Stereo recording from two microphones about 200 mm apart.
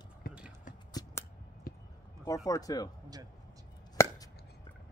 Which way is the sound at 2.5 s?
20° left (ahead or behind).